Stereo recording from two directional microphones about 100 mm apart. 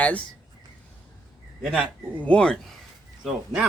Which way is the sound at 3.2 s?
5° right (ahead or behind).